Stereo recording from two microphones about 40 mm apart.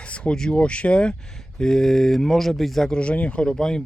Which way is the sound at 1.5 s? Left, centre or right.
Centre.